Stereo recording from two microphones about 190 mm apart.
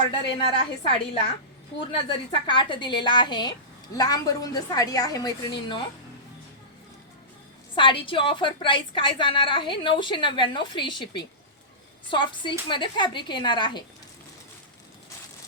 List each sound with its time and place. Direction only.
0.1 s a woman's voice: 25° left (ahead or behind)
7.8 s a woman's voice: 25° left (ahead or behind)
12.1 s a woman's voice: 25° left (ahead or behind)